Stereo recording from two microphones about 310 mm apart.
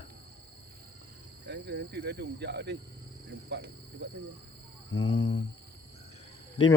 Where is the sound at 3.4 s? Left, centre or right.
Right.